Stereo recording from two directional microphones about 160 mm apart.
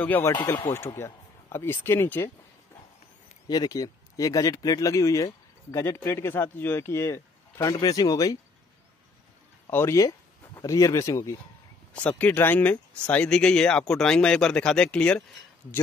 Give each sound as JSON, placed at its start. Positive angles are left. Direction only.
{"t": 0.0, "sound": "speech", "side_deg": 15}
{"t": 0.4, "sound": "speech", "side_deg": 25}
{"t": 3.4, "sound": "speech", "side_deg": 25}
{"t": 9.7, "sound": "speech", "side_deg": 15}
{"t": 11.9, "sound": "speech", "side_deg": 10}